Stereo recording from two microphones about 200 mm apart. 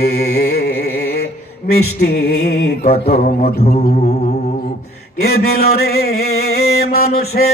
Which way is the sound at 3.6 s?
35° left (ahead or behind).